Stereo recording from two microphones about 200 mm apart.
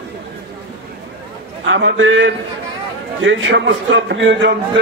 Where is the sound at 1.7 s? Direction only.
70° right (ahead or behind).